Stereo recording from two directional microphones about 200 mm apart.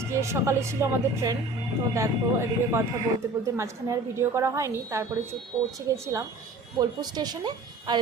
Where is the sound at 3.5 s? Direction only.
15° right (ahead or behind).